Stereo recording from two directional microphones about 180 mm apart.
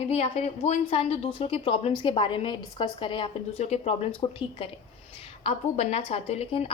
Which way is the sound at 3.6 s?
35° left (ahead or behind).